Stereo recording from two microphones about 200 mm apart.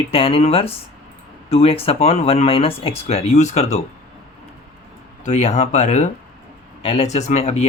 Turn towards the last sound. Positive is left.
turn(degrees=30)  # may be behind; listen again after turning